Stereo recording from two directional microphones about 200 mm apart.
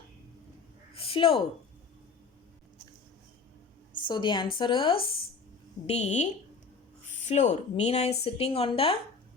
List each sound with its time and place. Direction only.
0.9 s a sound: 25° left (ahead or behind)
3.9 s a woman's voice: 25° left (ahead or behind)
7.3 s speech: 35° left (ahead or behind)